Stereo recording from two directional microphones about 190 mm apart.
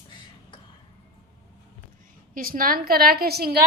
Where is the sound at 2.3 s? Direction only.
45° right (ahead or behind).